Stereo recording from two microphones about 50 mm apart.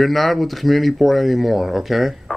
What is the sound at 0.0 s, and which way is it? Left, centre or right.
Speech, centre.